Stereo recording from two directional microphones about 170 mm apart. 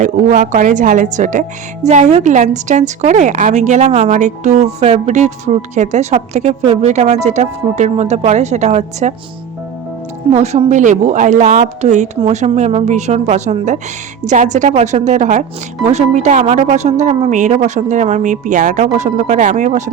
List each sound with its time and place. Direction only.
0.0 s speech: 50° right (ahead or behind)
10.3 s speech: 40° right (ahead or behind)